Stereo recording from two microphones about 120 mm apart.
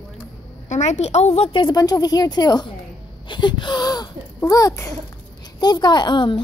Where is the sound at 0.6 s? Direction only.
85° left.